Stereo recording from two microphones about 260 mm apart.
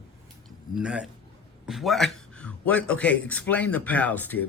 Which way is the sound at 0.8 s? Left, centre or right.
Centre.